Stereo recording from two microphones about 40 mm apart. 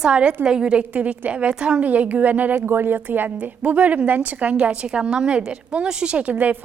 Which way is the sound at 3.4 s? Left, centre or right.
Right.